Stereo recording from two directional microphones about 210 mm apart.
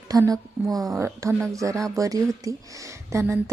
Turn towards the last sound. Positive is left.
turn(degrees=-10)  # may be behind; listen again after turning